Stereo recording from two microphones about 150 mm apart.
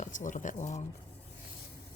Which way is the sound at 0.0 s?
60° left (ahead or behind).